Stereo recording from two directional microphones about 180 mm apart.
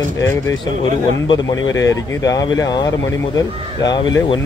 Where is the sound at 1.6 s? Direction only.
90° left.